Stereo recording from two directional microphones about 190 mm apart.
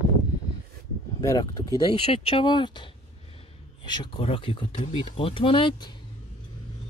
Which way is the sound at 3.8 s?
25° left (ahead or behind).